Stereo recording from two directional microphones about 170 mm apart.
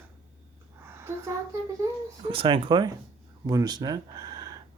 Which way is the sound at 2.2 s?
30° right (ahead or behind).